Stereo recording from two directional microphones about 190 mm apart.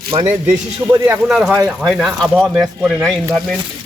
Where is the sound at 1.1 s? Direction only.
5° right (ahead or behind).